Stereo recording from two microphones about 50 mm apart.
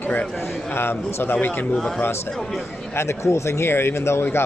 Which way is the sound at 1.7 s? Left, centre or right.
Centre.